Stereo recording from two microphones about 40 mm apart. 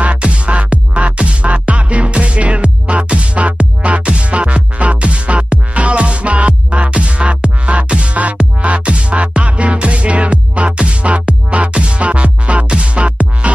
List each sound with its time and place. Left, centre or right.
0.0 s music: right